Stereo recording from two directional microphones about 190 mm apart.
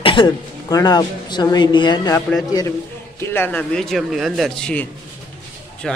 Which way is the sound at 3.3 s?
10° left (ahead or behind).